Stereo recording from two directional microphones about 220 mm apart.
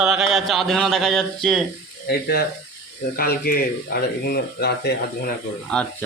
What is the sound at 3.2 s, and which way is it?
Speech, 40° left (ahead or behind).